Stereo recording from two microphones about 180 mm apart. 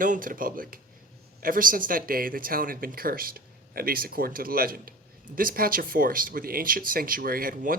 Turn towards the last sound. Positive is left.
turn(degrees=-55)  # may be behind; listen again after turning